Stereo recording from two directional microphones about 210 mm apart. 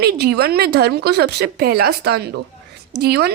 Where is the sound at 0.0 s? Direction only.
50° right (ahead or behind).